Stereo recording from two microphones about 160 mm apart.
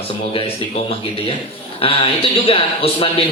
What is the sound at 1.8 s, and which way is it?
A man's voice, 35° left (ahead or behind).